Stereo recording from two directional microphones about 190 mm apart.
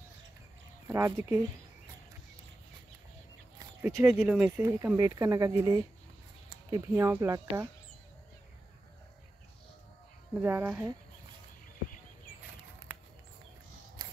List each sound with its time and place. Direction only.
0.8 s speech: 15° right (ahead or behind)
3.5 s a sound: 15° right (ahead or behind)
4.2 s speech: 5° right (ahead or behind)
10.3 s speech: 10° right (ahead or behind)